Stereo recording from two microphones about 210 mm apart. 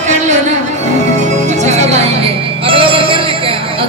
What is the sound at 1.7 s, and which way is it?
Speech, 30° right (ahead or behind).